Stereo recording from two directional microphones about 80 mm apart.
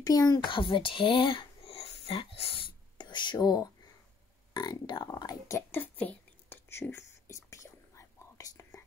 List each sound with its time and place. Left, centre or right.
0.0 s speech: left
0.4 s speech: left
4.6 s speech: left
5.1 s speech: left
5.7 s whispering: left
6.7 s whispering: left